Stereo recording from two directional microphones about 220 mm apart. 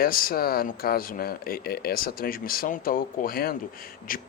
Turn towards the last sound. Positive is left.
turn(degrees=40)  # may be behind; listen again after turning